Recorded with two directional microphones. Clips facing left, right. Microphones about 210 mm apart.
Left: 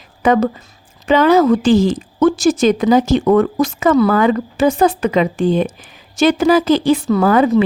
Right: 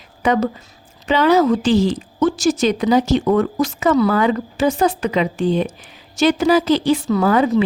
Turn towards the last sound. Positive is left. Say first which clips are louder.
# left 3 dB
turn(degrees=55)  # may be behind; listen again after turning